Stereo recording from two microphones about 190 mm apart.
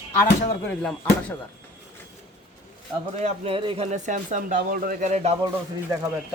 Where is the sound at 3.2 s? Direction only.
35° right (ahead or behind).